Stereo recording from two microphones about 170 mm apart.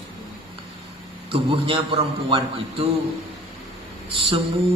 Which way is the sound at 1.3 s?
30° right (ahead or behind).